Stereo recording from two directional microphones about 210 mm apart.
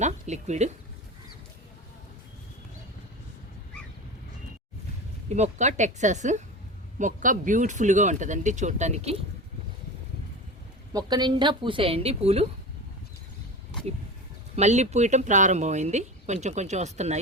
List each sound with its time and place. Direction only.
0.0 s speech: 35° right (ahead or behind)
5.3 s speech: 35° right (ahead or behind)
10.9 s a woman's voice: 20° right (ahead or behind)
14.5 s speech: 30° right (ahead or behind)